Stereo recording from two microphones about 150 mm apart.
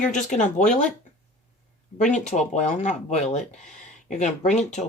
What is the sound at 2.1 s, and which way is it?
Speech, 50° left (ahead or behind).